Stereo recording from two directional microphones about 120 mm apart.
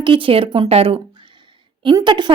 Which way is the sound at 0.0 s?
45° right (ahead or behind).